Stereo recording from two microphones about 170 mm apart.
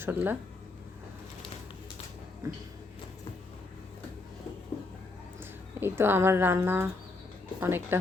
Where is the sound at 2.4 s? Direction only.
20° right (ahead or behind).